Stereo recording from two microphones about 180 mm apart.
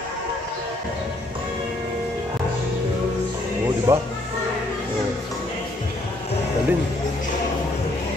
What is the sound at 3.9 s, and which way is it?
Speech, 15° right (ahead or behind).